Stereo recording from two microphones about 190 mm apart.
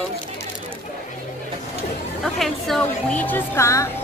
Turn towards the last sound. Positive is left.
turn(degrees=15)  # may be behind; listen again after turning